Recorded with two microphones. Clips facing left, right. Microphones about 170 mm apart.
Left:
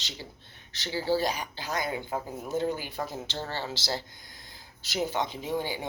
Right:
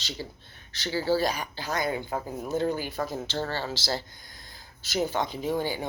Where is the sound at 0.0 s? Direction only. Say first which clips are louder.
Right 5 dB; 20° left (ahead or behind).